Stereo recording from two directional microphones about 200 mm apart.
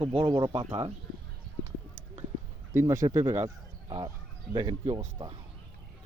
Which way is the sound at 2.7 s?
15° right (ahead or behind).